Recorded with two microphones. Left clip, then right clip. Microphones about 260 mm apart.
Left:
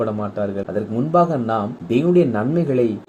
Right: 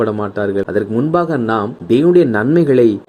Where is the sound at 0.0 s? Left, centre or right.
Right.